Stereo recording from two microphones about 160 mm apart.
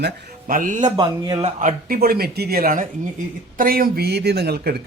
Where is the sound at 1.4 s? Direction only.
50° right (ahead or behind).